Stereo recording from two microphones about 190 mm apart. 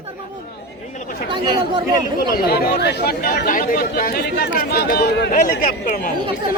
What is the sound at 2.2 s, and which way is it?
Speech, 55° left (ahead or behind).